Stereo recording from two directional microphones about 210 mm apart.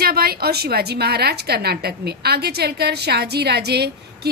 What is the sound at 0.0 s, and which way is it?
A woman's voice, 45° right (ahead or behind).